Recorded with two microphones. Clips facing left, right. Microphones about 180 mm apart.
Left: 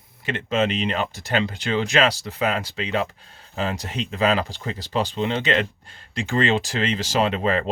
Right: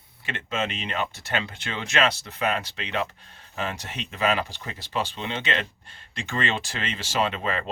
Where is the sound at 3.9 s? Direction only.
30° left (ahead or behind).